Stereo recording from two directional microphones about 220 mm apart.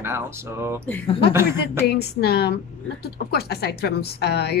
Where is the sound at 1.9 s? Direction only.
45° left (ahead or behind).